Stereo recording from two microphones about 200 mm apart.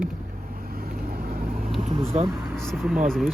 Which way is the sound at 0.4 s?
45° right (ahead or behind).